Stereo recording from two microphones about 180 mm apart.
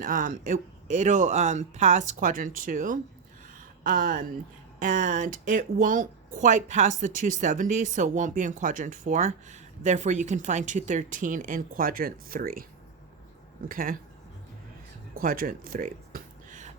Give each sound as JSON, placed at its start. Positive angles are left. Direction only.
{"t": 0.0, "sound": "speech", "side_deg": -45}
{"t": 13.7, "sound": "speech", "side_deg": -50}
{"t": 15.1, "sound": "a sound", "side_deg": -50}